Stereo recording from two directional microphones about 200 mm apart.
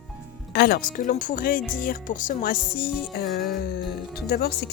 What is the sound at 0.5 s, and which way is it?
Speech, 50° left (ahead or behind).